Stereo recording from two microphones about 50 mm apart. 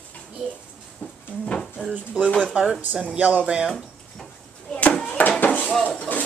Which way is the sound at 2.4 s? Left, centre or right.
Right.